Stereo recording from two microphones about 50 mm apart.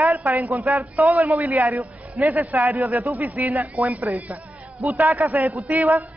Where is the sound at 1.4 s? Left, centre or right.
Right.